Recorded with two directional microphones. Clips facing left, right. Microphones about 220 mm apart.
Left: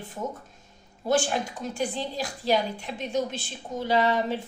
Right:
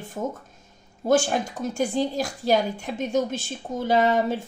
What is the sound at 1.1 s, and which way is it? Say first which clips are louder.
A woman's voice: right 4 dB; 45° right (ahead or behind).